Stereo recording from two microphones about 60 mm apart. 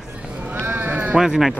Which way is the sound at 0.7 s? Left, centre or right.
Right.